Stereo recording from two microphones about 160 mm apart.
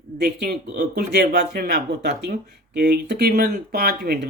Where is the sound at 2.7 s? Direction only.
75° right (ahead or behind).